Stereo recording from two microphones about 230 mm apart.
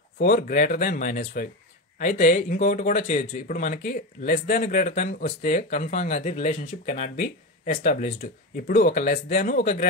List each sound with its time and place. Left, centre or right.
0.2 s speech: left